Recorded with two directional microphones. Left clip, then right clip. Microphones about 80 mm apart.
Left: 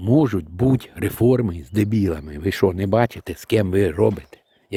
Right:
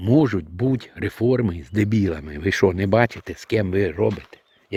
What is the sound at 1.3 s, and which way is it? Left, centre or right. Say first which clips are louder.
Speech: left 1 dB; left.